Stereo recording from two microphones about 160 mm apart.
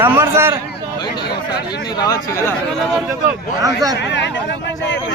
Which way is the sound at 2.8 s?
Centre (ahead or behind).